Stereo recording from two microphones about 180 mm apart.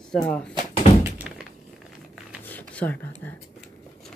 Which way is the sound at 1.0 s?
10° right (ahead or behind).